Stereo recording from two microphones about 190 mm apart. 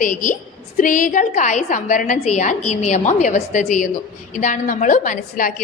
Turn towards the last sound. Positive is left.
turn(degrees=40)  # may be behind; listen again after turning